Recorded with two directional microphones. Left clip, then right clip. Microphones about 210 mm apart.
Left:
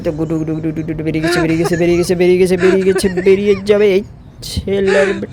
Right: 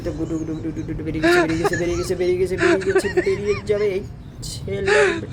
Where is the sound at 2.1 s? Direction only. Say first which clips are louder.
Left 8 dB; 35° left (ahead or behind).